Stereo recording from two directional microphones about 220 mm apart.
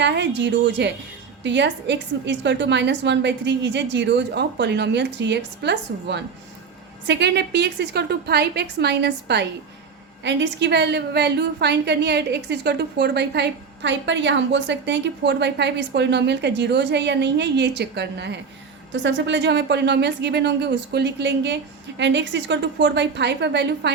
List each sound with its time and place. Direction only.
0.0 s a woman's voice: 50° right (ahead or behind)